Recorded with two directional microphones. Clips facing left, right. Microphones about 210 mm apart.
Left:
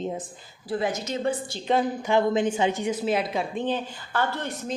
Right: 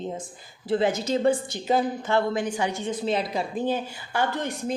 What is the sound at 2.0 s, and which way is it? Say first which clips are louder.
Speech: left 2 dB; 15° left (ahead or behind).